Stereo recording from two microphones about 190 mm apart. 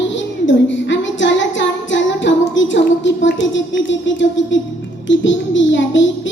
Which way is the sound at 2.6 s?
75° left (ahead or behind).